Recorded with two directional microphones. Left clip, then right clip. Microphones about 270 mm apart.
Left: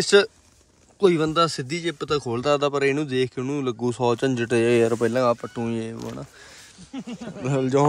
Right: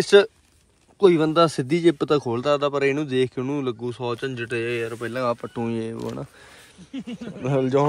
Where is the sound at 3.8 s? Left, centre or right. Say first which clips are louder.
Left 5 dB; centre.